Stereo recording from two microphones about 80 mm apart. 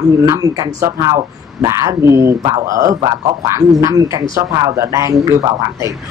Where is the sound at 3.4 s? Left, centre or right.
Right.